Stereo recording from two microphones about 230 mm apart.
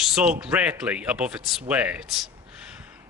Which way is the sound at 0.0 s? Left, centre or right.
Centre.